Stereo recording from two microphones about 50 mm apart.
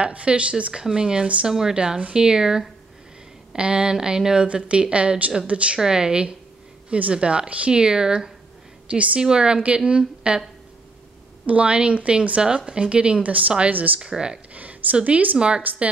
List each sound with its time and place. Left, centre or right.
0.0 s a woman's voice: right
5.8 s a woman's voice: centre
11.4 s a woman's voice: right
14.0 s speech: centre
14.5 s a sound: right
15.0 s a woman's voice: right
15.6 s a woman's voice: right